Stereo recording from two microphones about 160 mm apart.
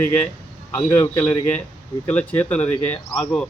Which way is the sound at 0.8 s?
10° left (ahead or behind).